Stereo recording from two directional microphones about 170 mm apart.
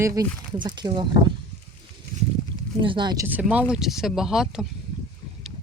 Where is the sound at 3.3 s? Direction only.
10° right (ahead or behind).